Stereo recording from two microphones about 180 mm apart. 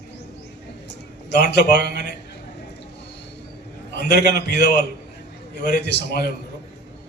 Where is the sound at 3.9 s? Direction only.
65° left (ahead or behind).